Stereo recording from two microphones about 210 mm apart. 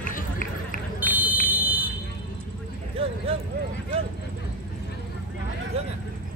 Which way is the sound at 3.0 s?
25° right (ahead or behind).